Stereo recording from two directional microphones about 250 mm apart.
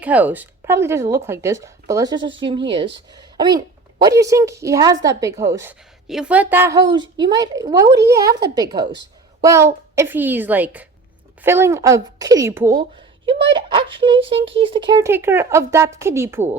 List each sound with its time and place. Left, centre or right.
0.0 s a woman's voice: centre